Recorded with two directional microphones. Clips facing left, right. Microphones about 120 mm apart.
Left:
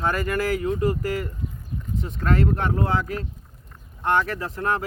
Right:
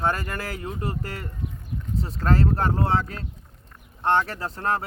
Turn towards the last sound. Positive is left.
turn(degrees=-30)  # may be behind; listen again after turning